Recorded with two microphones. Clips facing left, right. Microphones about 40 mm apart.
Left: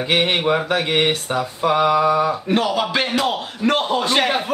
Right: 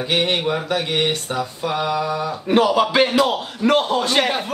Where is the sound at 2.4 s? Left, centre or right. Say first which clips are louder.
Right 3 dB; centre.